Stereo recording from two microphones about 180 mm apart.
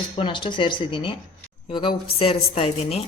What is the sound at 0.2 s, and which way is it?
A woman's voice, 25° left (ahead or behind).